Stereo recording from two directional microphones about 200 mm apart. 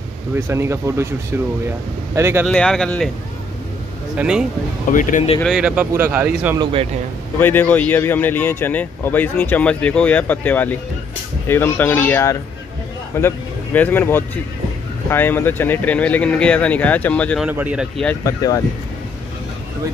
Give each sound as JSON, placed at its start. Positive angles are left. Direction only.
{"t": 0.5, "sound": "speech", "side_deg": -15}
{"t": 2.1, "sound": "speech", "side_deg": -15}
{"t": 2.4, "sound": "speech", "side_deg": 5}
{"t": 4.2, "sound": "speech", "side_deg": -5}
{"t": 4.9, "sound": "speech", "side_deg": 40}
{"t": 5.4, "sound": "speech", "side_deg": -5}
{"t": 6.6, "sound": "speech", "side_deg": -25}
{"t": 7.3, "sound": "speech", "side_deg": 10}
{"t": 17.5, "sound": "speech", "side_deg": -5}
{"t": 18.0, "sound": "speech", "side_deg": 15}